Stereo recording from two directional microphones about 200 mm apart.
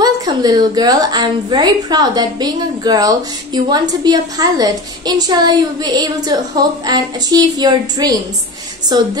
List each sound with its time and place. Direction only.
0.0 s a woman's voice: 20° right (ahead or behind)